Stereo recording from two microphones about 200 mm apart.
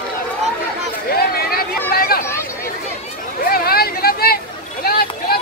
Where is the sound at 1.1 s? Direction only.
50° left (ahead or behind).